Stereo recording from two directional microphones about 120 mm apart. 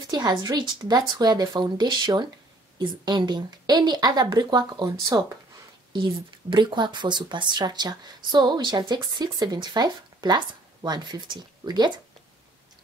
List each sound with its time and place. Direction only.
0.0 s speech: 35° right (ahead or behind)
6.5 s speech: 40° right (ahead or behind)